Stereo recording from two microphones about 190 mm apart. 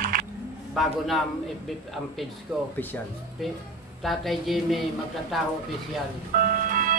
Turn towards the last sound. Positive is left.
turn(degrees=-45)  # may be behind; listen again after turning